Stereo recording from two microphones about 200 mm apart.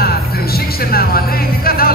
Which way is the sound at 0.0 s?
50° left (ahead or behind).